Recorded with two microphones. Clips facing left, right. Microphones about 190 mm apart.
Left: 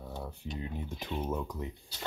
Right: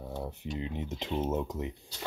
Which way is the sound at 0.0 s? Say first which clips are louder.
Right 3 dB; 20° right (ahead or behind).